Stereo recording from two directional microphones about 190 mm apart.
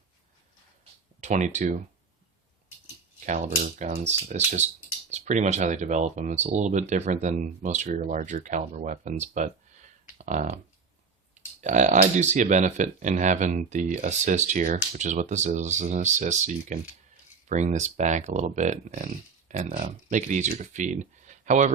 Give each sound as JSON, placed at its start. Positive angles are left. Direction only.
{"t": 1.2, "sound": "speech", "side_deg": -40}
{"t": 3.2, "sound": "speech", "side_deg": -40}